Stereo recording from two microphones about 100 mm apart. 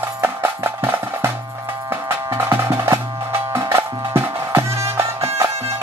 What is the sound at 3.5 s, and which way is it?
Music, 25° right (ahead or behind).